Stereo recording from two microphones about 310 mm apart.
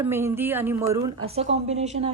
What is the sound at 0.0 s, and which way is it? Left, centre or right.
Speech, centre.